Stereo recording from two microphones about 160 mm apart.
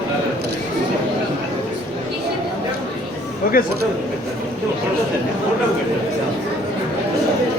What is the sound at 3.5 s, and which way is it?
Speech, 65° left (ahead or behind).